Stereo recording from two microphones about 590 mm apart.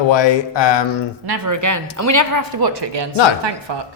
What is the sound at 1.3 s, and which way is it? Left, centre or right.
Speech, right.